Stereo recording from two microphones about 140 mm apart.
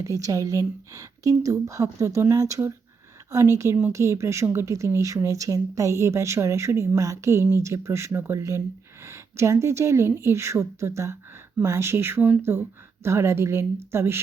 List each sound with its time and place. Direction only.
0.0 s speech: 25° right (ahead or behind)
3.9 s speech: 20° right (ahead or behind)